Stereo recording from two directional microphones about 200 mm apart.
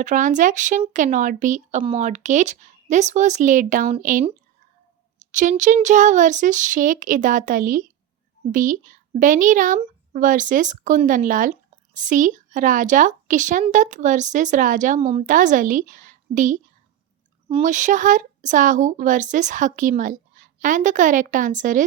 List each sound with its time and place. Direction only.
0.0 s a woman's voice: 40° right (ahead or behind)